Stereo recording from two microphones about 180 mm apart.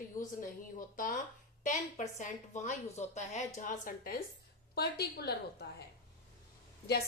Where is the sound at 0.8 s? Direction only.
50° left (ahead or behind).